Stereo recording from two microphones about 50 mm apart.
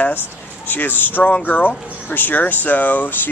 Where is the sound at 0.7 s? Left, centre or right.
Left.